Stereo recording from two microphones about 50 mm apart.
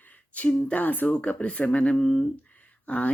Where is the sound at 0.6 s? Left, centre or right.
Left.